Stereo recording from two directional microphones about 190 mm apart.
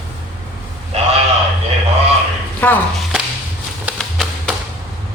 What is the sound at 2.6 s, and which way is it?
Speech, 10° left (ahead or behind).